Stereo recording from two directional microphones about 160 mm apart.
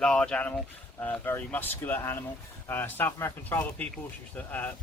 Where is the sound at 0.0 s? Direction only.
5° left (ahead or behind).